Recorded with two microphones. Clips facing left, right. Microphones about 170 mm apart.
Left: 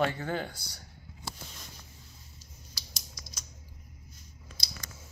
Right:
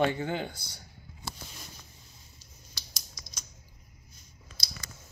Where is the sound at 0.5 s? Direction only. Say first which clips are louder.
Even; 10° left (ahead or behind).